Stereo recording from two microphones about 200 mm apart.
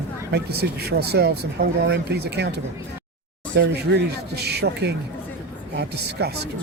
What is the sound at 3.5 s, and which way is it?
Speech, 55° right (ahead or behind).